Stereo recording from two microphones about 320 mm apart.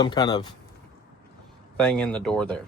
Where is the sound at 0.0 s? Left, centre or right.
Centre.